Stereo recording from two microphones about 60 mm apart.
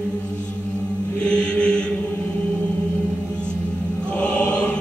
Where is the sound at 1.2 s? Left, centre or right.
Centre.